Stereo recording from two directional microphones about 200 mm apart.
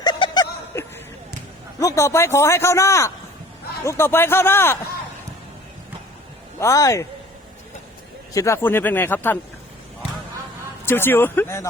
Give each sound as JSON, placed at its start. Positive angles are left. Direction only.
{"t": 0.0, "sound": "snicker", "side_deg": 20}
{"t": 1.8, "sound": "a man's voice", "side_deg": 15}
{"t": 6.6, "sound": "a man's voice", "side_deg": 15}
{"t": 8.3, "sound": "a man's voice", "side_deg": 15}
{"t": 10.8, "sound": "a man's voice", "side_deg": 10}